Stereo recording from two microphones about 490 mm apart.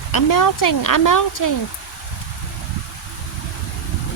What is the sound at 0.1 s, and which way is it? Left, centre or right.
Speech, left.